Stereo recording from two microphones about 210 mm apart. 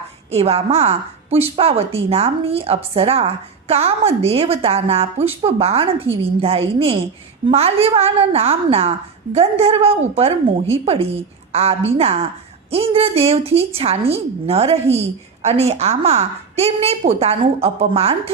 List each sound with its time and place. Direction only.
0.3 s a woman's voice: 30° right (ahead or behind)